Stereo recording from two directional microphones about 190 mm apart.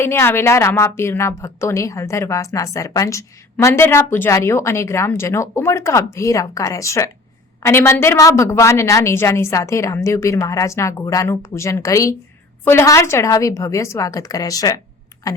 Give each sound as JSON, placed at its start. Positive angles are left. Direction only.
{"t": 0.0, "sound": "a woman's voice", "side_deg": 10}